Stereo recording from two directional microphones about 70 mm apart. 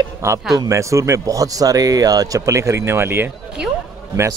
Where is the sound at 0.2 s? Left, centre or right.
Right.